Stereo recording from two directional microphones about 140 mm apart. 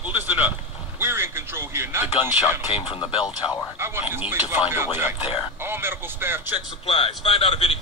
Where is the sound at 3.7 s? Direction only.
15° right (ahead or behind).